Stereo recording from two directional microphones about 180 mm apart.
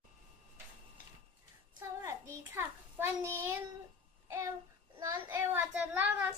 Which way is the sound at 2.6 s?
15° right (ahead or behind).